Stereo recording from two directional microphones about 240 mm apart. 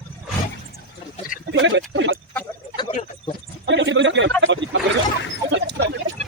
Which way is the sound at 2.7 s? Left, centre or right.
Left.